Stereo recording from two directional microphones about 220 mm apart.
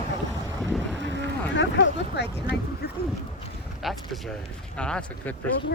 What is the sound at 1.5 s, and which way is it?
Speech, 55° left (ahead or behind).